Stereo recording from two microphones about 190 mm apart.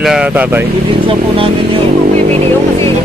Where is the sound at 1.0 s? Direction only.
30° right (ahead or behind).